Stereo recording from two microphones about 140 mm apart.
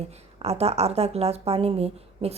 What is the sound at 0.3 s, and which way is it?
Speech, 45° right (ahead or behind).